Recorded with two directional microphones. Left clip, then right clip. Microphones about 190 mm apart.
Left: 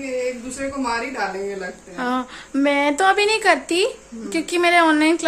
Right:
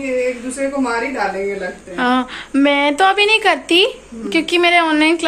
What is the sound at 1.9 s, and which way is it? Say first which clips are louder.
A woman's voice: right 7 dB; 10° left (ahead or behind).